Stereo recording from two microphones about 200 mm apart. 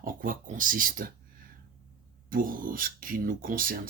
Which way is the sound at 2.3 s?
45° right (ahead or behind).